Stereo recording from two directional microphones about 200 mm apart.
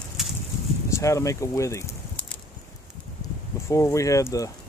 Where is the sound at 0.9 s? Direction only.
15° left (ahead or behind).